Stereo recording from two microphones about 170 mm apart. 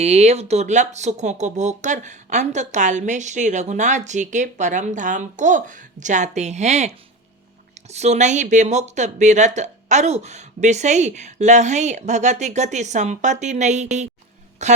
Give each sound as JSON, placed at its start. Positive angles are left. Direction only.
{"t": 0.0, "sound": "speech", "side_deg": -40}